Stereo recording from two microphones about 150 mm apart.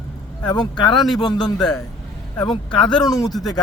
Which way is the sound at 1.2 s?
25° left (ahead or behind).